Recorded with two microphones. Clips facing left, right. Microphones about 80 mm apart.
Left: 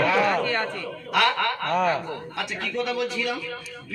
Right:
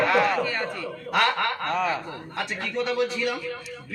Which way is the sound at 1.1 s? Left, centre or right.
Right.